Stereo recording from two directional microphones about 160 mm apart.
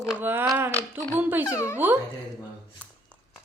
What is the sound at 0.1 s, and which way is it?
Speech, 10° right (ahead or behind).